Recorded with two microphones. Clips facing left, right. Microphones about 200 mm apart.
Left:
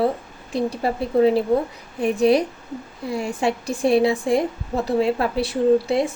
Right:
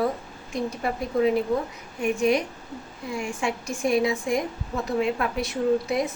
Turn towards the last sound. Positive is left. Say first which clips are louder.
# left 5 dB
turn(degrees=30)  # may be behind; listen again after turning